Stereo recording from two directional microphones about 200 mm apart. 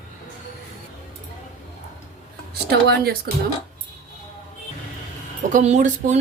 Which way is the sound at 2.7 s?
55° right (ahead or behind).